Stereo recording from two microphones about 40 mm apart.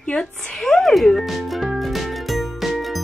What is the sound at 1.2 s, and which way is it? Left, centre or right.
Music, centre.